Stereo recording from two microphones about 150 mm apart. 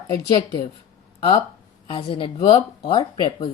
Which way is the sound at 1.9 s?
35° left (ahead or behind).